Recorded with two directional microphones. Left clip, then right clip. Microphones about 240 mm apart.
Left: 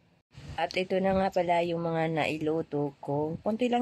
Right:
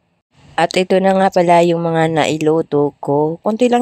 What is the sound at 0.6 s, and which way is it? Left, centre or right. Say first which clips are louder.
Speech: right 15 dB; right.